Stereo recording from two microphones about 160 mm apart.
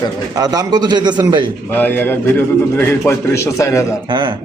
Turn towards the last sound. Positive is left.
turn(degrees=20)  # may be behind; listen again after turning